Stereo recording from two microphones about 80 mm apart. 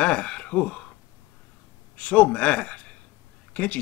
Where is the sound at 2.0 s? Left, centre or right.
Centre.